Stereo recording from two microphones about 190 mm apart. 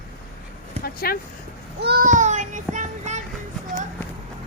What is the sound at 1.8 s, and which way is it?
Child singing, 50° right (ahead or behind).